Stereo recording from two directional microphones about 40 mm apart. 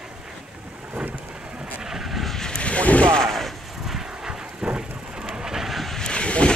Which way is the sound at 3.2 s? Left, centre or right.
Centre.